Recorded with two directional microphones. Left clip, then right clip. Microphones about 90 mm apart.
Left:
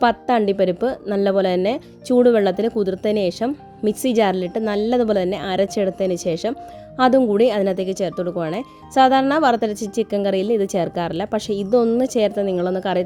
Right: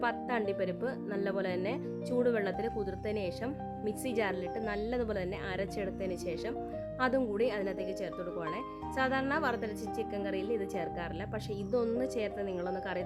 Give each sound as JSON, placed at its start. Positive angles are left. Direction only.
{"t": 0.0, "sound": "speech", "side_deg": 35}